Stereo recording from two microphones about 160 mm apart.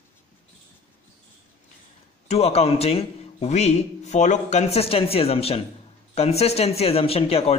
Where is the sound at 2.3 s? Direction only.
40° left (ahead or behind).